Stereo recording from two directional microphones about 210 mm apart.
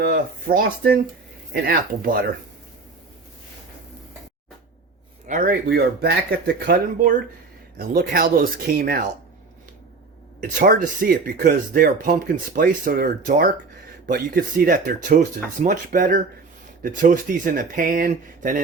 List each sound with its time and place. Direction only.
0.0 s speech: 50° right (ahead or behind)
5.3 s speech: 45° right (ahead or behind)
10.6 s speech: 45° right (ahead or behind)